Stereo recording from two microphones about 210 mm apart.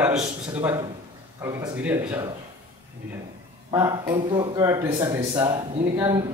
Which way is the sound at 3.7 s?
15° right (ahead or behind).